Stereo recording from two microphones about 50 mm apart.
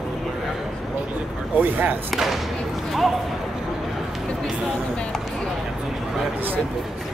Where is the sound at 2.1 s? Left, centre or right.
Centre.